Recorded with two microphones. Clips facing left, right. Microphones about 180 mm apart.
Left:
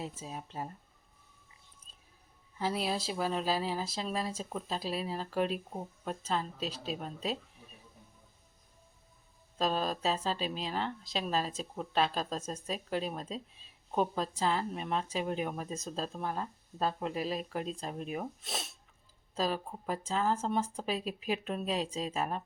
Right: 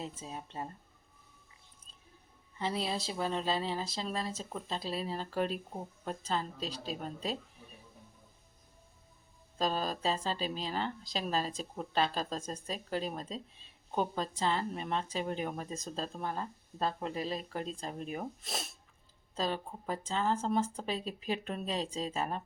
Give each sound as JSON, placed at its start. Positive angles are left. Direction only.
{"t": 0.0, "sound": "speech", "side_deg": 5}
{"t": 2.6, "sound": "speech", "side_deg": 5}
{"t": 9.6, "sound": "speech", "side_deg": 0}